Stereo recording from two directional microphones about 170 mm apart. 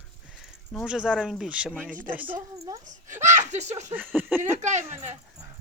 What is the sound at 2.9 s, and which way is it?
Speech, 45° right (ahead or behind).